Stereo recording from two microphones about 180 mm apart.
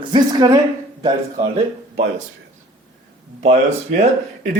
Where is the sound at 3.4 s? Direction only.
40° right (ahead or behind).